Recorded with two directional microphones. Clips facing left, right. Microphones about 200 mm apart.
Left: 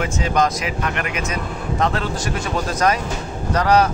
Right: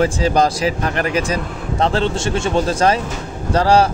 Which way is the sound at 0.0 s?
35° right (ahead or behind).